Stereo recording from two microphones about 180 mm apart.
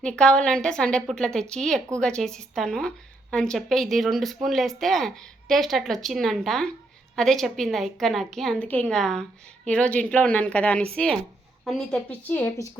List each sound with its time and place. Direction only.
0.0 s a woman's voice: 5° left (ahead or behind)